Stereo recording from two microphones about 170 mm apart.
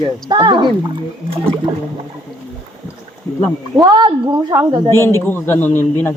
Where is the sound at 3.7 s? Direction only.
25° right (ahead or behind).